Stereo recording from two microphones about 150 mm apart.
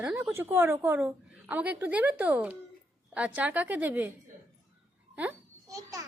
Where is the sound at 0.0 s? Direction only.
10° right (ahead or behind).